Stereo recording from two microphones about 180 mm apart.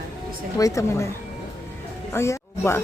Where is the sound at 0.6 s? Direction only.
15° left (ahead or behind).